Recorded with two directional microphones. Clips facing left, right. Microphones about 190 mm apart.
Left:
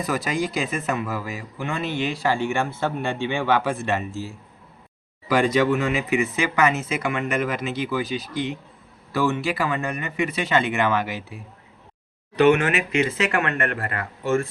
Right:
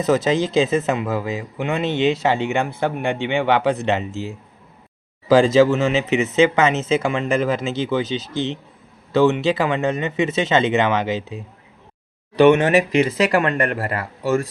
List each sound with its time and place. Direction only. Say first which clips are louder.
0.0 s speech: right 7 dB; 25° right (ahead or behind)
12.5 s speech: right 6 dB; 35° right (ahead or behind)